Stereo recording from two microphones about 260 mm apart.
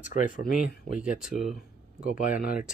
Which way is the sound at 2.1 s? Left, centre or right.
Left.